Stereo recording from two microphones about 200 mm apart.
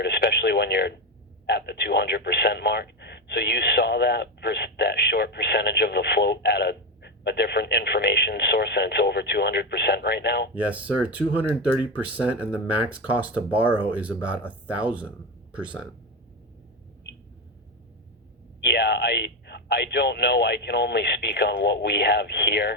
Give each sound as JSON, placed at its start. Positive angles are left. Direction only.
{"t": 0.0, "sound": "speech", "side_deg": 55}
{"t": 10.5, "sound": "speech", "side_deg": -5}
{"t": 13.8, "sound": "speech", "side_deg": -5}
{"t": 18.6, "sound": "speech", "side_deg": 55}